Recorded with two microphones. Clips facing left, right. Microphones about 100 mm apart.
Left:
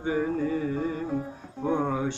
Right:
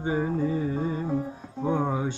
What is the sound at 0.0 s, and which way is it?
Carnatic music, 25° right (ahead or behind).